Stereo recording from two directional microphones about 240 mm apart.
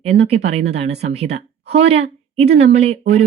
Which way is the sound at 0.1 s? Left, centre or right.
Right.